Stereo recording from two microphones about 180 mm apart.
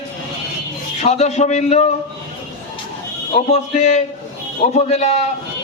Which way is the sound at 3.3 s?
40° left (ahead or behind).